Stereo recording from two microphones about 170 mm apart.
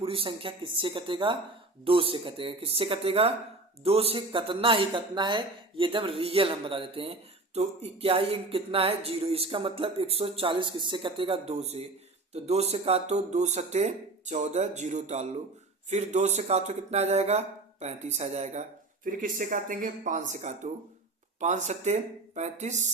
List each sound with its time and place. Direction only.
0.0 s speech: 35° right (ahead or behind)
19.0 s speech: 55° right (ahead or behind)